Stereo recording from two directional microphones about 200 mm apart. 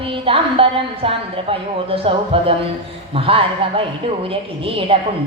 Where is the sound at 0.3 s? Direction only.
25° right (ahead or behind).